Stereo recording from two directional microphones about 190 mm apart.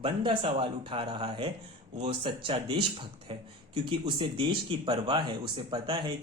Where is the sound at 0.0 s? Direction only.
30° right (ahead or behind).